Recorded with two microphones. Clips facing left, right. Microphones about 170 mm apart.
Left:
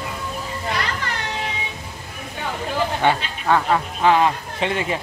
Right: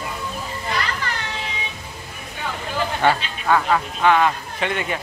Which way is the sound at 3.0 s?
15° left (ahead or behind).